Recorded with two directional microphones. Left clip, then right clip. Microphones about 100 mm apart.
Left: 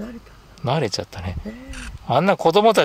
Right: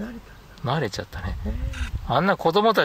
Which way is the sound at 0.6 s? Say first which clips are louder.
Left 4 dB; 20° left (ahead or behind).